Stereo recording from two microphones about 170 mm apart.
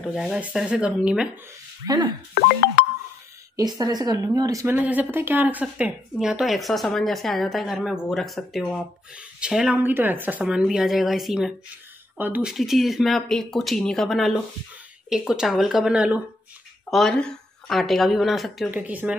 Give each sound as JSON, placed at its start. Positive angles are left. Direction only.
{"t": 0.1, "sound": "speech", "side_deg": -5}
{"t": 1.9, "sound": "speech", "side_deg": -25}
{"t": 3.5, "sound": "a woman's voice", "side_deg": -25}
{"t": 16.9, "sound": "speech", "side_deg": 5}